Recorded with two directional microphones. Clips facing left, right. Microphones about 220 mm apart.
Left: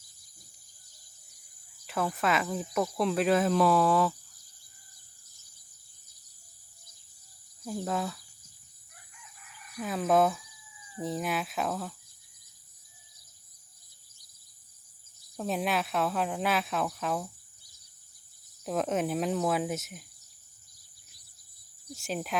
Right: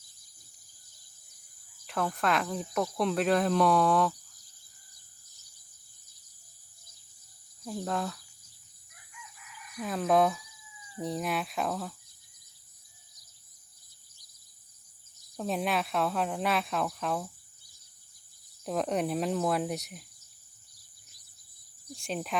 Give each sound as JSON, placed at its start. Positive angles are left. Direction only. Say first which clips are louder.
{"t": 1.9, "sound": "speech", "louder": "even", "side_deg": 5}
{"t": 7.6, "sound": "speech", "louder": "left 1 dB", "side_deg": 5}
{"t": 9.1, "sound": "chicken", "louder": "right 5 dB", "side_deg": 40}
{"t": 9.8, "sound": "speech", "louder": "even", "side_deg": 0}
{"t": 15.4, "sound": "speech", "louder": "even", "side_deg": 0}
{"t": 18.6, "sound": "speech", "louder": "even", "side_deg": 0}
{"t": 21.9, "sound": "speech", "louder": "even", "side_deg": 0}